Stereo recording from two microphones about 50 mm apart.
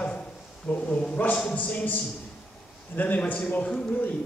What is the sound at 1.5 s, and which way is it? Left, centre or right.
A man's voice, left.